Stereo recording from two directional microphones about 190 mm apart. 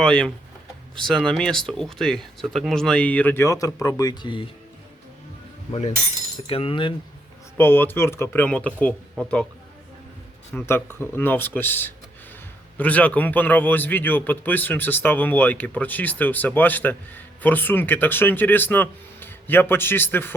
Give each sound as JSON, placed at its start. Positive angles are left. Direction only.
{"t": 0.0, "sound": "speech", "side_deg": 5}
{"t": 6.5, "sound": "coin", "side_deg": 30}
{"t": 7.5, "sound": "a man's voice", "side_deg": 10}
{"t": 10.5, "sound": "a man's voice", "side_deg": 10}